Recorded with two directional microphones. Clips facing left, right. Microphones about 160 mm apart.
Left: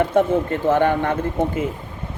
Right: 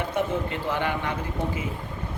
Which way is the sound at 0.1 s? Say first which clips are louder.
Left 9 dB; 50° left (ahead or behind).